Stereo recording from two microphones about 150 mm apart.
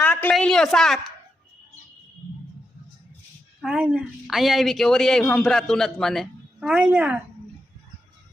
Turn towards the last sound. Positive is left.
turn(degrees=-10)  # may be behind; listen again after turning